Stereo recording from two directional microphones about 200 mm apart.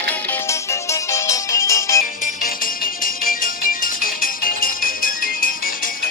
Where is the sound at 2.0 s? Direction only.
40° left (ahead or behind).